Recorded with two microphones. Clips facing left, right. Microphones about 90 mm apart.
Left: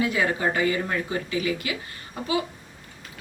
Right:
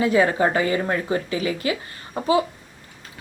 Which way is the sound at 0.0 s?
35° right (ahead or behind).